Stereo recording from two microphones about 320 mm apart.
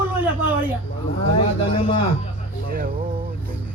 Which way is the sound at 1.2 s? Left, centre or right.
Centre.